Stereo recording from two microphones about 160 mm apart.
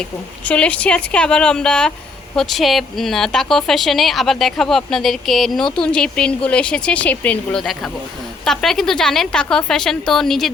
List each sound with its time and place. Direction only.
0.0 s a woman's voice: 5° left (ahead or behind)